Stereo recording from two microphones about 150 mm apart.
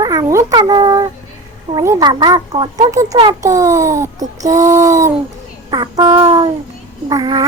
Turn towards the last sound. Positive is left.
turn(degrees=-25)  # may be behind; listen again after turning